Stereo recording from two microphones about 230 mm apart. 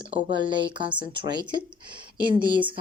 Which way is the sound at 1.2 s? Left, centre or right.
Centre.